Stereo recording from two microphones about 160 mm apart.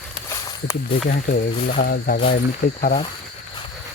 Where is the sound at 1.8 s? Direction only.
80° left.